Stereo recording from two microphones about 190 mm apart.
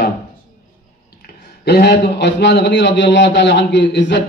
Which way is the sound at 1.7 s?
60° left (ahead or behind).